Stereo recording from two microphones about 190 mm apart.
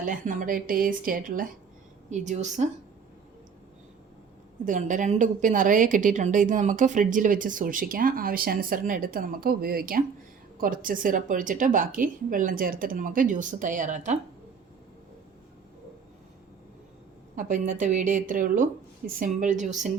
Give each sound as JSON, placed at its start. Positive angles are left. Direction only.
{"t": 0.0, "sound": "a woman's voice", "side_deg": -45}
{"t": 4.6, "sound": "a woman's voice", "side_deg": -40}
{"t": 17.3, "sound": "a woman's voice", "side_deg": -40}